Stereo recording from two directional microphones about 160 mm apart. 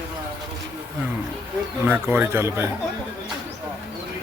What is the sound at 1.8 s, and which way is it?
Speech, 10° right (ahead or behind).